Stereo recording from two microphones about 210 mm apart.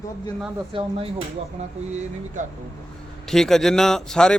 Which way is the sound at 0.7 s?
25° right (ahead or behind).